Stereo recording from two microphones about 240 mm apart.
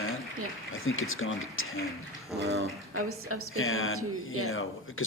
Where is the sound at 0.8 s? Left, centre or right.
Left.